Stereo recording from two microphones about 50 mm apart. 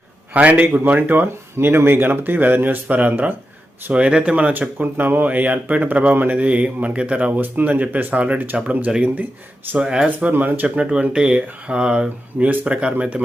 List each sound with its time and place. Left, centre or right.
0.3 s speech: right
3.9 s speech: right
4.8 s speech: right
9.8 s speech: centre
10.1 s speech: right
10.8 s speech: right